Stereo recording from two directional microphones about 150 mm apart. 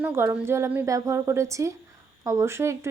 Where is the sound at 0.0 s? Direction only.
15° right (ahead or behind).